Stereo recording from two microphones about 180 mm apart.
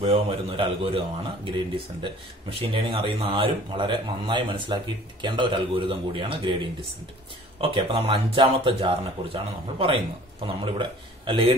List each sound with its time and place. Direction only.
0.0 s speech: 30° right (ahead or behind)
2.6 s speech: 30° right (ahead or behind)